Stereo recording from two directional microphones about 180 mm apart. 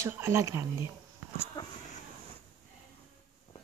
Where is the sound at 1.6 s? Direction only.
20° left (ahead or behind).